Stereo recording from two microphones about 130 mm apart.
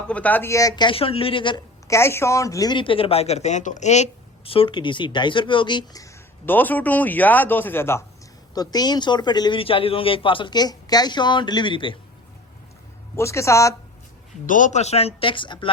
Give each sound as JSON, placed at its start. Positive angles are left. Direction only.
{"t": 0.1, "sound": "speech", "side_deg": 10}
{"t": 0.9, "sound": "speech", "side_deg": 45}
{"t": 1.9, "sound": "speech", "side_deg": 20}
{"t": 6.4, "sound": "speech", "side_deg": 15}
{"t": 8.5, "sound": "speech", "side_deg": 30}
{"t": 13.1, "sound": "speech", "side_deg": 20}
{"t": 14.4, "sound": "speech", "side_deg": 85}